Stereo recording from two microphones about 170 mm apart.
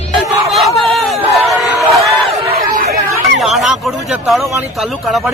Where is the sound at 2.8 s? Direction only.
65° right (ahead or behind).